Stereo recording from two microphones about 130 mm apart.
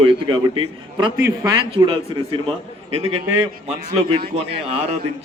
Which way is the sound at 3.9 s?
45° right (ahead or behind).